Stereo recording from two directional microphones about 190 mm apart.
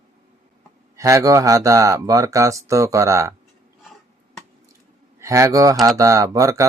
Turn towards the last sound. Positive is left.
turn(degrees=-15)  # may be behind; listen again after turning